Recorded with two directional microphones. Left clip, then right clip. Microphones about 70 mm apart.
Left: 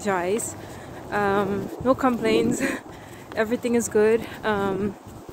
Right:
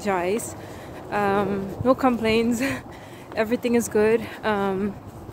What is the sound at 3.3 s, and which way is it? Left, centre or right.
Speech, right.